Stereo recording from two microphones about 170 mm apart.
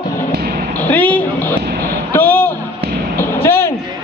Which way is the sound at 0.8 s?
10° left (ahead or behind).